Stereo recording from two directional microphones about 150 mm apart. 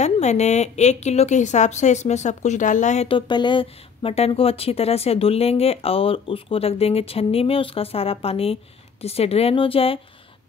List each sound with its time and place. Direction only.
0.0 s a woman's voice: 50° left (ahead or behind)
3.1 s speech: 30° left (ahead or behind)